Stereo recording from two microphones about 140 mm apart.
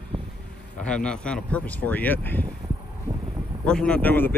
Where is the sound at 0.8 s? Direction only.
5° left (ahead or behind).